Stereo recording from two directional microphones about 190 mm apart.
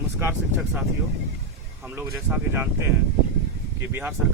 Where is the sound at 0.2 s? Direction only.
10° right (ahead or behind).